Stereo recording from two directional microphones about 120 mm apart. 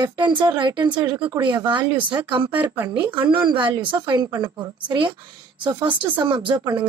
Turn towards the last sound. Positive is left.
turn(degrees=-45)  # may be behind; listen again after turning